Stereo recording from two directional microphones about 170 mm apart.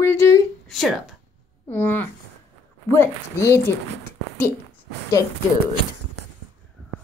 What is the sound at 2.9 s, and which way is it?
Speech, 15° left (ahead or behind).